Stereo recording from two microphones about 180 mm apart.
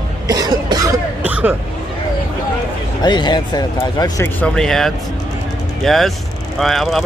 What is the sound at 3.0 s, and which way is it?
Speech, 25° left (ahead or behind).